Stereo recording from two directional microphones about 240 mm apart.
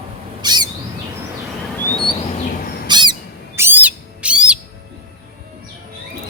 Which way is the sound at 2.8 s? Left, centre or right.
Centre.